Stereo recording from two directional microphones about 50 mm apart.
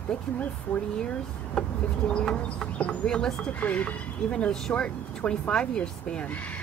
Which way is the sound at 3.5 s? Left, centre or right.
Left.